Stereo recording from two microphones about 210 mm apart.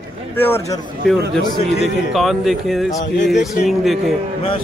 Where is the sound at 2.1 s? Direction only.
Centre (ahead or behind).